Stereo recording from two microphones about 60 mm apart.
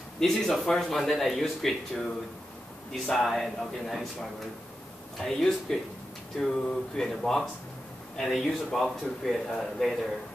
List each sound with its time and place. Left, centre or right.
0.2 s speech: centre